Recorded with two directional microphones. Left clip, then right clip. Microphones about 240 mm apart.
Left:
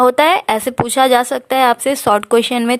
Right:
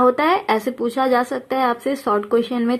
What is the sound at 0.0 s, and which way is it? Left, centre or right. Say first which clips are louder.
Speech: left 5 dB; left.